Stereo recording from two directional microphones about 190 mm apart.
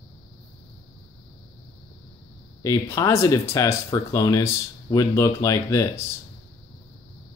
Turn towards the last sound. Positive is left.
turn(degrees=15)  # may be behind; listen again after turning